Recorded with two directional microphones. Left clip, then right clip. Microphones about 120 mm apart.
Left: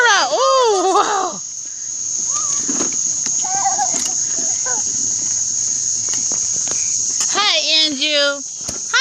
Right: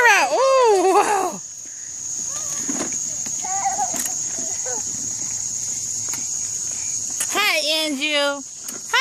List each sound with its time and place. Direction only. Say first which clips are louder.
0.0 s baby cry: left 1 dB; 30° right (ahead or behind)
7.3 s a sound: left 3 dB; 50° right (ahead or behind)
7.8 s child singing: left 5 dB; 55° right (ahead or behind)